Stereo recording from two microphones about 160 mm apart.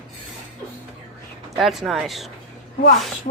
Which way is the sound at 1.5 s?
Centre (ahead or behind).